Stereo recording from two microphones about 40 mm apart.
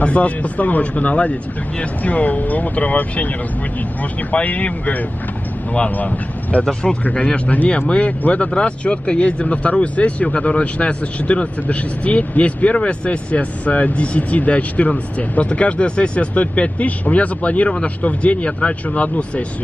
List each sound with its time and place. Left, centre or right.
0.0 s speech: left
4.3 s speech: left
7.2 s speech: left